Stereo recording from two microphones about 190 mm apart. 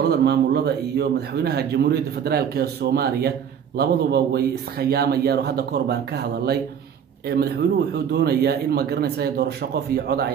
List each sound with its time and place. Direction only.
0.0 s a man's voice: 60° right (ahead or behind)